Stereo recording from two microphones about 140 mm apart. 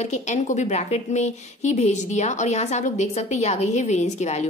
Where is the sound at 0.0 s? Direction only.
55° left (ahead or behind).